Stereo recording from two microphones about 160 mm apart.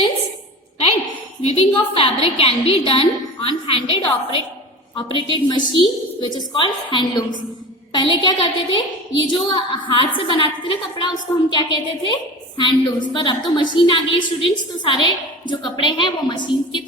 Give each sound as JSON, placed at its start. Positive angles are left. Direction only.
{"t": 1.4, "sound": "a woman's voice", "side_deg": 40}